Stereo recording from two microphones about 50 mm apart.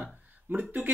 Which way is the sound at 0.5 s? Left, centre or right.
Right.